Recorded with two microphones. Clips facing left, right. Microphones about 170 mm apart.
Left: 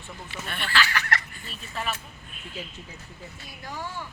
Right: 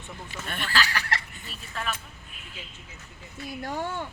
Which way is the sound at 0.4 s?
45° right (ahead or behind).